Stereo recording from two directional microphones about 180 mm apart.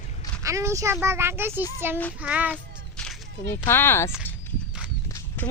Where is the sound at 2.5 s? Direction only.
5° left (ahead or behind).